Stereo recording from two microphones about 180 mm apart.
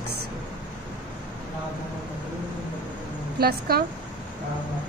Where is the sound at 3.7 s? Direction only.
55° right (ahead or behind).